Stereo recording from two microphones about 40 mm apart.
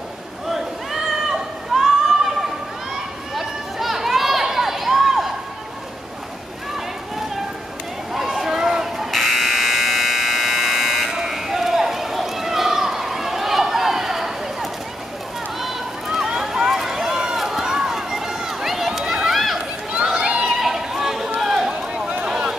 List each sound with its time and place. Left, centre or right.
1.7 s a sound: centre
8.1 s buzzer: centre
11.1 s run: centre
20.2 s run: right
20.6 s chatter: centre
21.4 s run: centre